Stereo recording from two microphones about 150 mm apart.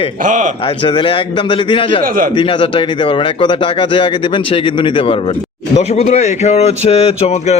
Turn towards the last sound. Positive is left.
turn(degrees=45)  # may be behind; listen again after turning